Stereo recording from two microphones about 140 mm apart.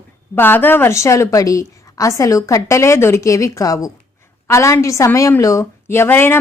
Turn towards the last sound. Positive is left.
turn(degrees=15)  # may be behind; listen again after turning